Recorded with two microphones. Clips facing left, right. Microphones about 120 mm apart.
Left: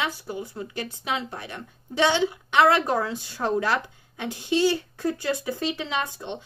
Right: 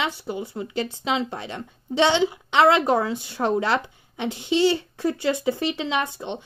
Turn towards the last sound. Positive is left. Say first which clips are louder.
# right 3 dB
turn(degrees=-15)  # may be behind; listen again after turning